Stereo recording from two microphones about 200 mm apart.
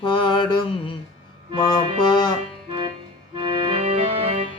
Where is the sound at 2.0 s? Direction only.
20° left (ahead or behind).